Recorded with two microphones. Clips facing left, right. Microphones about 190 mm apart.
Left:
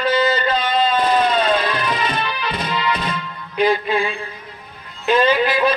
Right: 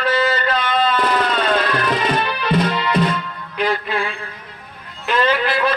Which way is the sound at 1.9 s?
55° right (ahead or behind).